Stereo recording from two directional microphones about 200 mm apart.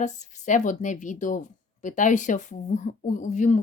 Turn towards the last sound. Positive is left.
turn(degrees=35)  # may be behind; listen again after turning